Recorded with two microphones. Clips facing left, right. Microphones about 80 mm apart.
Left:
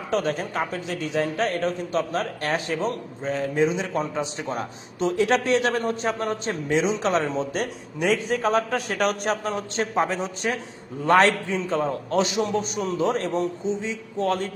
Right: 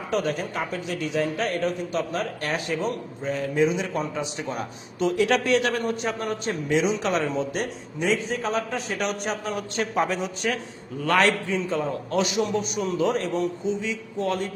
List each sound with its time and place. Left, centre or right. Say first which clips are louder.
0.1 s a man's voice: left 1 dB; left
7.6 s a man's voice: left 2 dB; left
9.6 s a man's voice: left 1 dB; left